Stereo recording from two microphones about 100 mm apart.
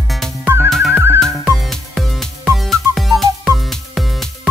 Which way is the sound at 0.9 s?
25° right (ahead or behind).